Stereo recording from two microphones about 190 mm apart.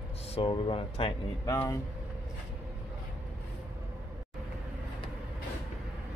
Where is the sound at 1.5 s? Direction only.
15° left (ahead or behind).